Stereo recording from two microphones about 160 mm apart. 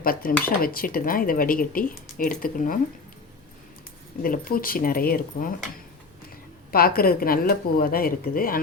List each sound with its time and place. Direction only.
0.0 s speech: 65° left (ahead or behind)
4.2 s speech: 65° left (ahead or behind)
6.7 s speech: 70° left (ahead or behind)